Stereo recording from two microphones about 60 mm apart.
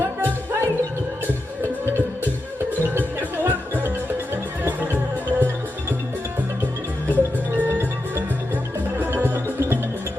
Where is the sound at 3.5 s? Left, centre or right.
Right.